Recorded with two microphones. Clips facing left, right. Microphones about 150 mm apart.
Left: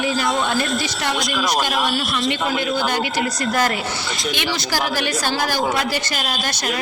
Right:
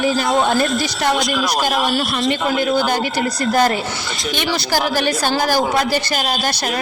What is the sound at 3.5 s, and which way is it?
Speech, 35° right (ahead or behind).